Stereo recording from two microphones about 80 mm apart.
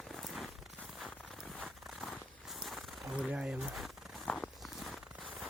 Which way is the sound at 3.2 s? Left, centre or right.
Centre.